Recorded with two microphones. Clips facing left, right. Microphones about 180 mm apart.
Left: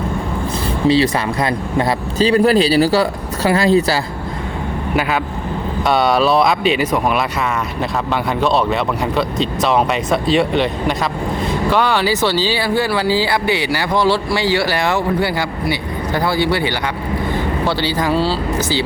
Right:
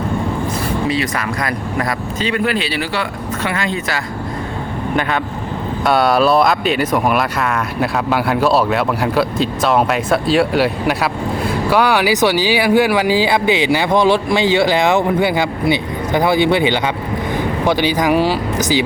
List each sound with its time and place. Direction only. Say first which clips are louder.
0.9 s speech: left 5 dB; 30° left (ahead or behind)
4.9 s speech: left 1 dB; 5° left (ahead or behind); by 18.8 s 15° right (ahead or behind)